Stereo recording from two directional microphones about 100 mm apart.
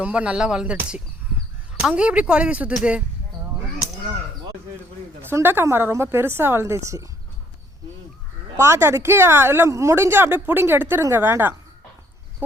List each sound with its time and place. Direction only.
0.0 s speech: 15° right (ahead or behind)
5.2 s speech: 20° right (ahead or behind)
8.5 s speech: 30° right (ahead or behind)